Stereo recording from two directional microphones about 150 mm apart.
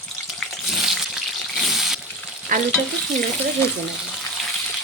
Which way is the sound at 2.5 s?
60° right (ahead or behind).